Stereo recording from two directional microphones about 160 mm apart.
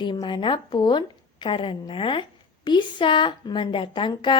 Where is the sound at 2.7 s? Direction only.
30° left (ahead or behind).